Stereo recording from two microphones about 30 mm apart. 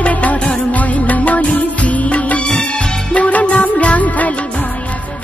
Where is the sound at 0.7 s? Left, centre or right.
Left.